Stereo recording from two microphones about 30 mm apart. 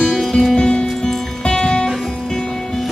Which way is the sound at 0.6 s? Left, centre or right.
Left.